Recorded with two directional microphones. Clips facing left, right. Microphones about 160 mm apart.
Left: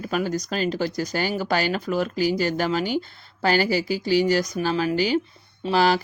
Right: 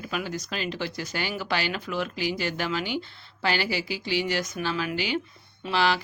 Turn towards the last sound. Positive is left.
turn(degrees=40)  # may be behind; listen again after turning